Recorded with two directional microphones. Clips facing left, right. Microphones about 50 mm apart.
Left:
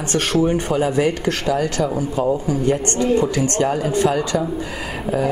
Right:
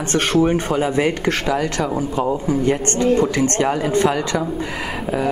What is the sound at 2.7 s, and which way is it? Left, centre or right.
Speech, right.